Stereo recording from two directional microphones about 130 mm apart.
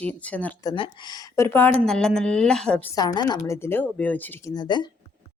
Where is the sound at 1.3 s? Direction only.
20° left (ahead or behind).